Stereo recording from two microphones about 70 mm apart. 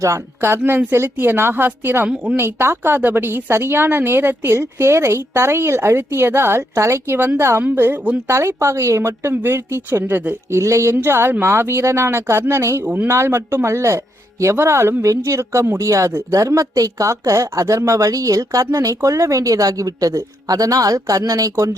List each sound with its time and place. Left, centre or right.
0.0 s speech: right
0.5 s a woman's voice: right
7.2 s a woman's voice: right
8.3 s a woman's voice: right
10.5 s speech: right
10.9 s a woman's voice: right
12.8 s speech: right
13.1 s a woman's voice: right